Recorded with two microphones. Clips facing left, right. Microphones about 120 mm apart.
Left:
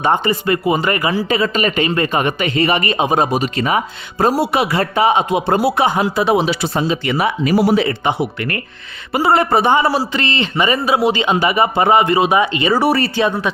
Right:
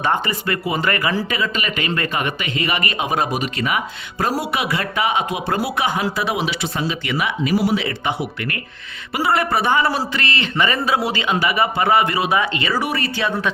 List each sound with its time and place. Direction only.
0.0 s speech: 25° left (ahead or behind)
1.3 s a man's voice: 35° left (ahead or behind)
8.0 s speech: 25° left (ahead or behind)
12.8 s a man's voice: 35° left (ahead or behind)
13.1 s speech: 25° left (ahead or behind)